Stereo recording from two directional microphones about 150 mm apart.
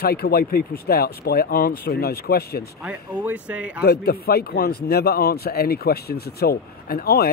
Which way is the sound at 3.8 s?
90° left.